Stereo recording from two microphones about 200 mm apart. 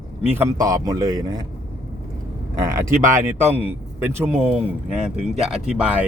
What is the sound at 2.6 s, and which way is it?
Speech, 15° right (ahead or behind).